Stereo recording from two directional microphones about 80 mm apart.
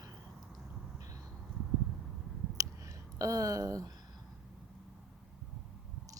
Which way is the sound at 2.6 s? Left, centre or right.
Right.